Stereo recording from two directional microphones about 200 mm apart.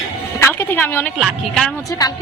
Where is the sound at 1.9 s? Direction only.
20° left (ahead or behind).